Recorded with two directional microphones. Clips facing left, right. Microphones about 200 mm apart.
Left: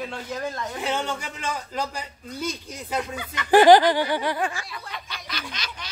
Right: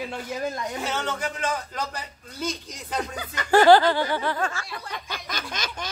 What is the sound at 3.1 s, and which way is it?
Speech, 40° right (ahead or behind).